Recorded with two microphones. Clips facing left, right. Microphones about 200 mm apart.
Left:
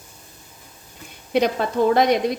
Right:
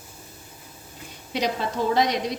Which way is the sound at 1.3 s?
55° left (ahead or behind).